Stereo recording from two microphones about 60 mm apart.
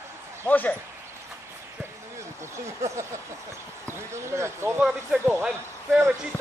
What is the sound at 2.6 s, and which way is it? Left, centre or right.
Speech, right.